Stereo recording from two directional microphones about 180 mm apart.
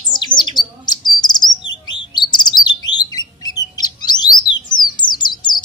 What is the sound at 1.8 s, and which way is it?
Bird, 25° left (ahead or behind).